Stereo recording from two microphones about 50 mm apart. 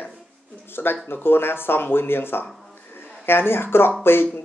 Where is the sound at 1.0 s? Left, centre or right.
Left.